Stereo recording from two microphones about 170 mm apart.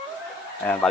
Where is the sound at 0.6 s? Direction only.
10° left (ahead or behind).